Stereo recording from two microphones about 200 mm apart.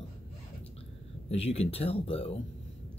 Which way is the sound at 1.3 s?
30° left (ahead or behind).